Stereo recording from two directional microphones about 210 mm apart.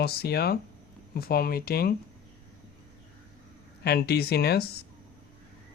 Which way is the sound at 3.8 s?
50° left (ahead or behind).